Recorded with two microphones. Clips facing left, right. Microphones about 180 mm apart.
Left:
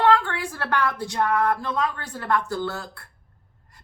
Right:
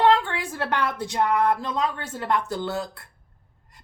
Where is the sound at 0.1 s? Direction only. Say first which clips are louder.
Even; 20° right (ahead or behind).